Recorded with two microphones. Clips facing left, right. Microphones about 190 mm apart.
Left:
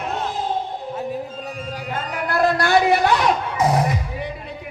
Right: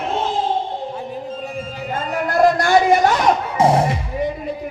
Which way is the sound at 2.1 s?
45° right (ahead or behind).